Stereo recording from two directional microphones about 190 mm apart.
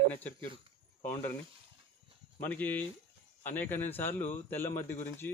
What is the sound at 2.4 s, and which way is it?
A man's voice, 10° left (ahead or behind).